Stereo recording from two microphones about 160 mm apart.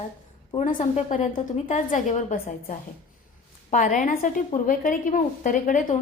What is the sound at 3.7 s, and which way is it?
A woman's voice, 55° left (ahead or behind).